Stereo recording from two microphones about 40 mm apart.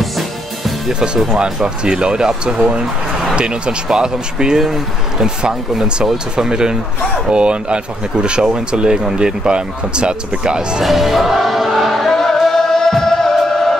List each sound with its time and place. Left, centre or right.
0.9 s speech: right
10.8 s music: centre
12.1 s music: centre